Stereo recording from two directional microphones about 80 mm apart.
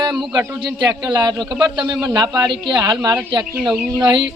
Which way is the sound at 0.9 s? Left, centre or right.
Right.